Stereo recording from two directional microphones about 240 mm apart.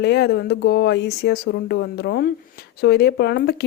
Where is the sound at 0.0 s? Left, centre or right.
Left.